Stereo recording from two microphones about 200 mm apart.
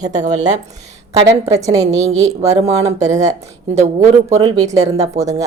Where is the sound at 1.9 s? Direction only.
35° right (ahead or behind).